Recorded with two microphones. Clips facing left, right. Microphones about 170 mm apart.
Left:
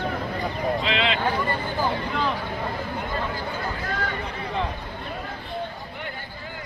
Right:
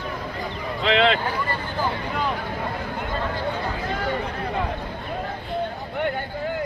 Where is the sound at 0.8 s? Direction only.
50° right (ahead or behind).